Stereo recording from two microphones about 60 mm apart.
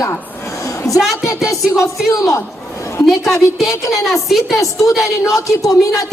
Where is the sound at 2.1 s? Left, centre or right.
Left.